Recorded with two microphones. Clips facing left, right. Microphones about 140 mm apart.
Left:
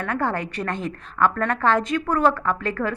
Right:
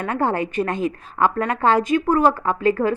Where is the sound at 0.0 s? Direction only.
15° right (ahead or behind).